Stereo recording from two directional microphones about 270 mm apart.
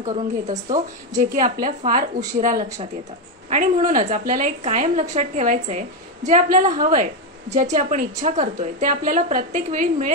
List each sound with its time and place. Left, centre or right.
0.0 s a woman's voice: right